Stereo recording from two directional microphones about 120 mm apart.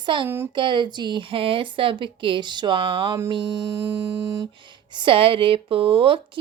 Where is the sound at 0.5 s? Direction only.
40° right (ahead or behind).